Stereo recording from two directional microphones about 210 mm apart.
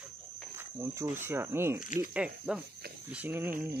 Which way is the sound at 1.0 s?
10° right (ahead or behind).